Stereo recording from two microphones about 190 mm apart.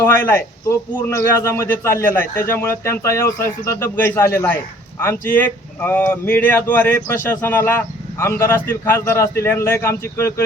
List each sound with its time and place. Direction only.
0.0 s speech: 15° left (ahead or behind)